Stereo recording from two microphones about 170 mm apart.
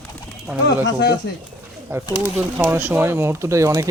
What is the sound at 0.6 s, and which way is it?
Speech, 85° left.